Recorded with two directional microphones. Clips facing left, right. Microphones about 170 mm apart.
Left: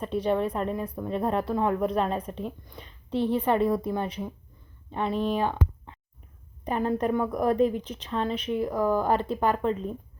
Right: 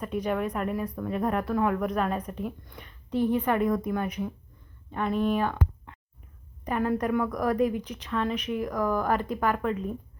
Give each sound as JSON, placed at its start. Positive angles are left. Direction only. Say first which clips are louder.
{"t": 0.0, "sound": "a woman's voice", "louder": "left 3 dB", "side_deg": 30}
{"t": 3.2, "sound": "a woman's voice", "louder": "right 1 dB", "side_deg": -15}
{"t": 3.4, "sound": "a woman's voice", "louder": "left 1 dB", "side_deg": 30}
{"t": 6.7, "sound": "a woman's voice", "louder": "left 1 dB", "side_deg": 30}